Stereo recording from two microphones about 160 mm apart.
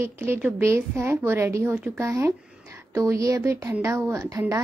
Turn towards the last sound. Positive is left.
turn(degrees=-20)  # may be behind; listen again after turning